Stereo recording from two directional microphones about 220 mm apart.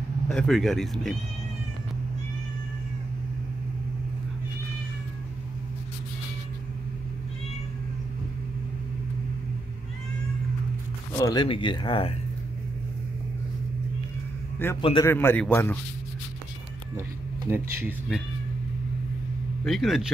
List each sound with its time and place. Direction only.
0.3 s speech: centre (ahead or behind)
11.1 s speech: 15° left (ahead or behind)
14.8 s speech: 25° left (ahead or behind)
15.0 s a man's voice: 10° left (ahead or behind)
17.5 s speech: 10° right (ahead or behind)
19.6 s speech: centre (ahead or behind)